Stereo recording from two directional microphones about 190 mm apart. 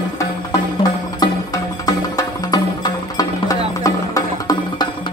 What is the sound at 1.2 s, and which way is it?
Music, 20° left (ahead or behind).